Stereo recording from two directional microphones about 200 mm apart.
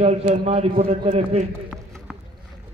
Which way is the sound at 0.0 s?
35° right (ahead or behind).